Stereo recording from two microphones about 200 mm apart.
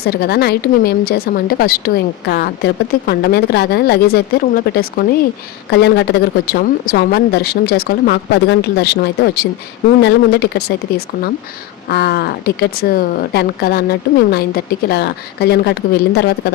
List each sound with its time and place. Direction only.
0.0 s a woman's voice: 50° left (ahead or behind)